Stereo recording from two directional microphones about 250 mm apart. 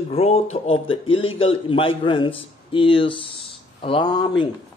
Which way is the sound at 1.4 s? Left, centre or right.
Left.